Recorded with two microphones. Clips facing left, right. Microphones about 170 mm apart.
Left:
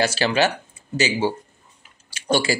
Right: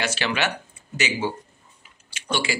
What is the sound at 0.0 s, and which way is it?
Speech, 35° left (ahead or behind).